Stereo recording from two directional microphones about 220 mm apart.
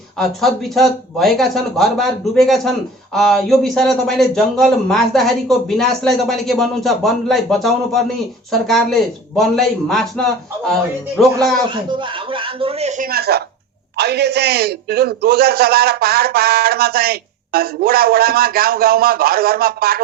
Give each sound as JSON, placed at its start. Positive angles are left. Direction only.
{"t": 0.2, "sound": "a man's voice", "side_deg": 0}
{"t": 11.7, "sound": "speech", "side_deg": -20}
{"t": 13.1, "sound": "a man's voice", "side_deg": -45}